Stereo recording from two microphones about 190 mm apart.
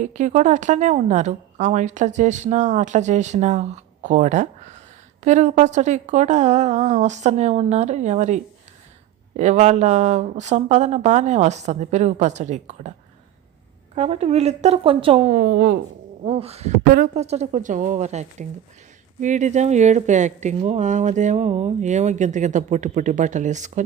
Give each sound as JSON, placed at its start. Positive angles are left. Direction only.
{"t": 0.0, "sound": "a woman's voice", "side_deg": -40}
{"t": 13.9, "sound": "a woman's voice", "side_deg": -35}
{"t": 16.2, "sound": "a woman's voice", "side_deg": -30}